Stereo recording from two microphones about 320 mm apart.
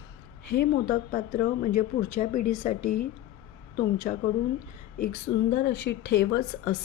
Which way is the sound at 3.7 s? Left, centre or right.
Left.